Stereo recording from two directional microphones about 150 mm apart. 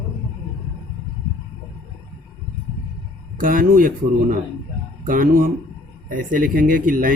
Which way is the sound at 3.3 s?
65° right (ahead or behind).